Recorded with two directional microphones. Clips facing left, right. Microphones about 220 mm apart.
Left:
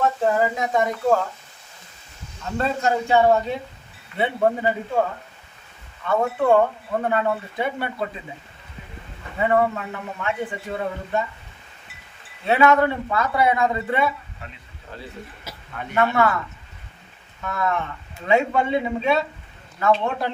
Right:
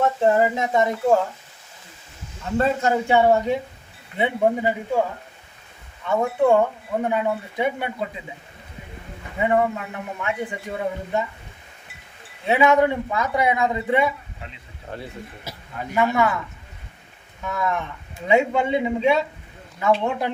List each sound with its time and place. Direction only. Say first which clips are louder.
0.0 s speech: right 2 dB; 25° right (ahead or behind)
2.8 s speech: left 2 dB; 15° right (ahead or behind)
6.1 s speech: right 1 dB; 10° right (ahead or behind)
9.4 s speech: even; 15° right (ahead or behind)
12.5 s speech: even; 15° right (ahead or behind)
16.0 s speech: even; 15° right (ahead or behind)
17.4 s speech: even; 15° right (ahead or behind)